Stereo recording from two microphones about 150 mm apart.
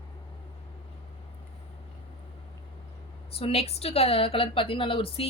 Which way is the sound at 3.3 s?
40° left (ahead or behind).